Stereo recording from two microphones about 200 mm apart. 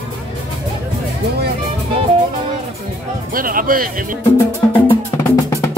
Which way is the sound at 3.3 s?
45° right (ahead or behind).